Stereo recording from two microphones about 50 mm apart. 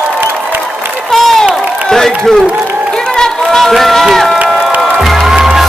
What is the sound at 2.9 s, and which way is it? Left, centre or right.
Run, centre.